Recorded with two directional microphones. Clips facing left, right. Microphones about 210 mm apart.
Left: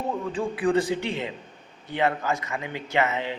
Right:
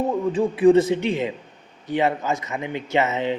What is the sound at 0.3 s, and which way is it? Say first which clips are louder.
A man's voice: right 8 dB; 25° right (ahead or behind).